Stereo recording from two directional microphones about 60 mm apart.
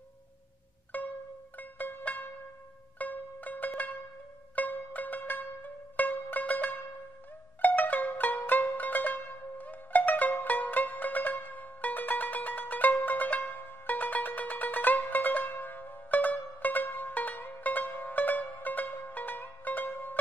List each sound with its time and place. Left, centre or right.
0.9 s pizzicato: left
1.6 s music: left